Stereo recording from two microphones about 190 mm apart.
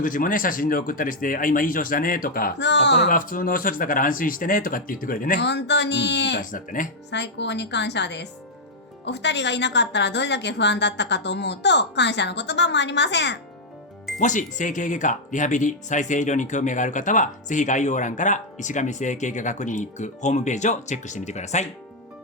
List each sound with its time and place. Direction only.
0.0 s speech: 45° left (ahead or behind); by 3.1 s 65° left (ahead or behind)
3.1 s speech: 45° left (ahead or behind)
5.5 s a woman's voice: 65° left (ahead or behind)
6.4 s speech: 45° left (ahead or behind)
7.1 s a woman's voice: 65° left (ahead or behind)
14.2 s speech: 40° left (ahead or behind)